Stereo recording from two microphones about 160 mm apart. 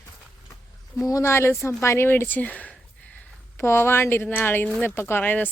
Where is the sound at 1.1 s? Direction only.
15° left (ahead or behind).